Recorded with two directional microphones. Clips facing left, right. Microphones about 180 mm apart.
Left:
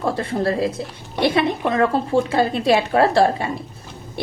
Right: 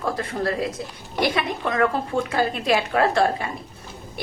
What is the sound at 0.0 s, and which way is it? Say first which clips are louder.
A woman's voice: left 4 dB; 30° left (ahead or behind).